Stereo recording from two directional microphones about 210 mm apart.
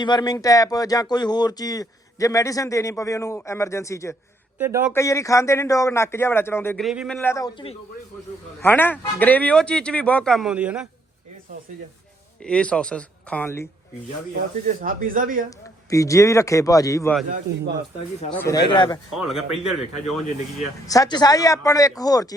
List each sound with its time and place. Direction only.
0.0 s speech: 20° left (ahead or behind)
4.5 s speech: 10° right (ahead or behind)
4.9 s speech: 15° left (ahead or behind)
6.8 s a man's voice: centre (ahead or behind)
7.2 s speech: 15° left (ahead or behind)
8.6 s a man's voice: 10° left (ahead or behind)
12.4 s a man's voice: 5° left (ahead or behind)
14.8 s speech: 40° right (ahead or behind)
15.4 s speech: 15° left (ahead or behind)
17.2 s speech: 40° right (ahead or behind)
18.3 s speech: 10° left (ahead or behind)
18.5 s speech: 20° left (ahead or behind)
19.1 s a man's voice: centre (ahead or behind)
20.8 s speech: 15° left (ahead or behind)